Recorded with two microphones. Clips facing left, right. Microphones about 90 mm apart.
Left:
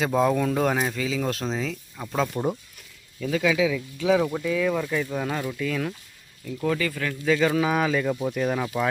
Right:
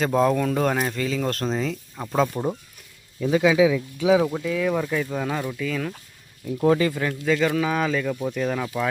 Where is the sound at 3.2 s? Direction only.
20° right (ahead or behind); by 5.9 s centre (ahead or behind).